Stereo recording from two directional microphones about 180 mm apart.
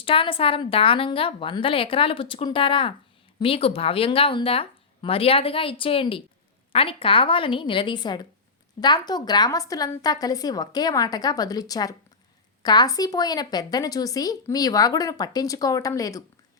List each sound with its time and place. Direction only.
0.0 s a woman's voice: 30° left (ahead or behind)